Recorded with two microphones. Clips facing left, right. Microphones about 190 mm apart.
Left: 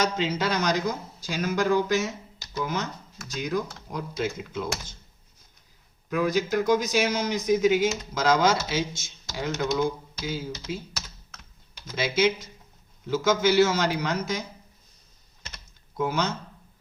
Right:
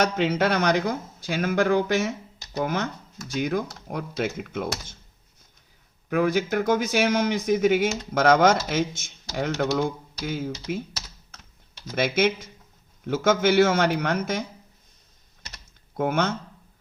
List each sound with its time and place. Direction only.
0.0 s speech: 60° right (ahead or behind)
6.1 s speech: 60° right (ahead or behind)
11.9 s speech: 55° right (ahead or behind)
16.0 s speech: 55° right (ahead or behind)